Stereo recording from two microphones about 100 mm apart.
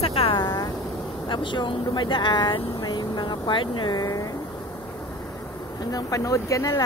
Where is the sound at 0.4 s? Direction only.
40° left (ahead or behind).